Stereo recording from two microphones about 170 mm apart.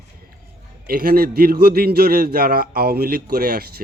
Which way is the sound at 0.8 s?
60° right (ahead or behind).